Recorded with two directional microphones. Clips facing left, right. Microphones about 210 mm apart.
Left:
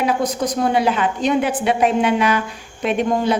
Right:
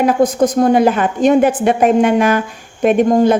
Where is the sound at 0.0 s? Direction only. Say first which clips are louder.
Right 7 dB; 50° right (ahead or behind).